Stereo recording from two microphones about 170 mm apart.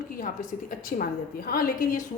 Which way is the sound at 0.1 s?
55° left (ahead or behind).